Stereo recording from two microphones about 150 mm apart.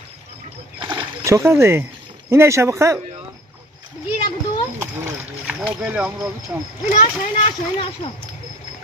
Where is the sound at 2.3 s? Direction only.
20° right (ahead or behind).